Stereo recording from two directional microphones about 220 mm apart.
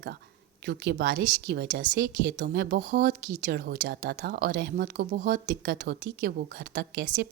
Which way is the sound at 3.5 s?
45° right (ahead or behind).